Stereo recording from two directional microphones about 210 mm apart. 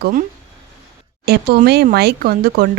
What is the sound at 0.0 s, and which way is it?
Speech, 40° right (ahead or behind).